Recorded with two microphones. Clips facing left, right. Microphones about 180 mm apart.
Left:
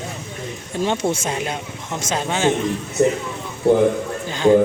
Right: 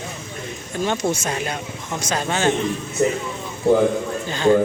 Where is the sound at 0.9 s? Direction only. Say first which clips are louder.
Left 1 dB; 25° left (ahead or behind).